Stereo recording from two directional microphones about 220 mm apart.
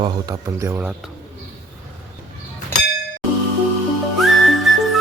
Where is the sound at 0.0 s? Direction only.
15° right (ahead or behind).